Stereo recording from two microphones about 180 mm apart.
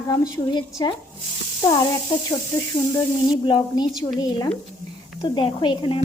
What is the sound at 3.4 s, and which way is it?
A woman's voice, 25° left (ahead or behind).